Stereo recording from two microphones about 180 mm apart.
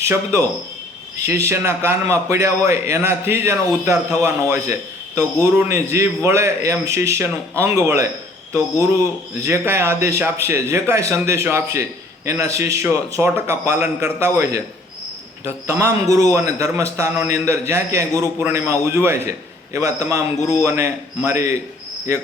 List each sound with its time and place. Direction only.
0.0 s a man's voice: 15° right (ahead or behind)